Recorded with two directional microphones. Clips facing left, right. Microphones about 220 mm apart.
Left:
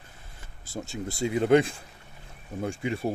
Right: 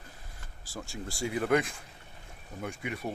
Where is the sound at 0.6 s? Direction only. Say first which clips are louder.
Left 6 dB; 20° left (ahead or behind).